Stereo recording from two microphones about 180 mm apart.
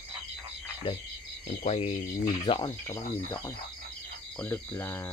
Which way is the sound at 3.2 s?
10° left (ahead or behind).